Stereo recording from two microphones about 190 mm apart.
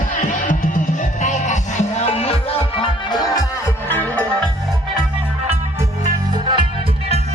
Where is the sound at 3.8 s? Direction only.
10° left (ahead or behind).